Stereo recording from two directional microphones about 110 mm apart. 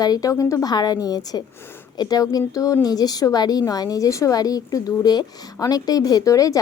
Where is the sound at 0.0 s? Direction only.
35° left (ahead or behind).